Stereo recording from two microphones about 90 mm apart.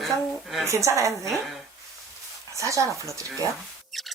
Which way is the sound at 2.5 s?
35° right (ahead or behind).